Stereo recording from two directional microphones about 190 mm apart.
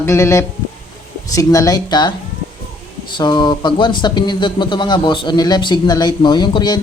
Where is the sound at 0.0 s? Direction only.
15° left (ahead or behind).